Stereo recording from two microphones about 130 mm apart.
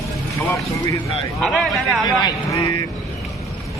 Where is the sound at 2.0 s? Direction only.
25° left (ahead or behind).